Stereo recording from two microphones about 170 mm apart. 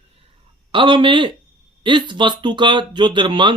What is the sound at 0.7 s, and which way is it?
Speech, 30° right (ahead or behind).